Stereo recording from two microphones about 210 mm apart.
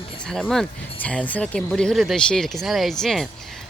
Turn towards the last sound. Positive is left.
turn(degrees=0)  # may be behind; listen again after turning